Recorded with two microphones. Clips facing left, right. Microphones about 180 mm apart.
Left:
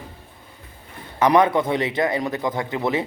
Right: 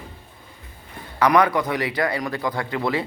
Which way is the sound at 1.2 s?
25° left (ahead or behind).